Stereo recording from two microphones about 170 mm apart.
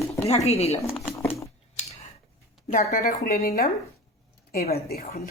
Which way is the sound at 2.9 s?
60° left (ahead or behind).